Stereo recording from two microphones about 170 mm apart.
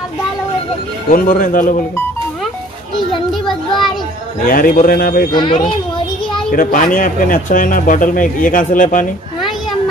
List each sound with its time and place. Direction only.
1.1 s a man's voice: 55° left (ahead or behind)
3.4 s a sound: centre (ahead or behind)
4.5 s a man's voice: 55° left (ahead or behind)
5.3 s a child's voice: 25° left (ahead or behind)
6.5 s speech: 50° left (ahead or behind)